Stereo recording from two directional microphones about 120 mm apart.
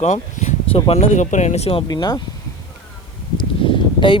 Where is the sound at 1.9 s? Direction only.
35° left (ahead or behind).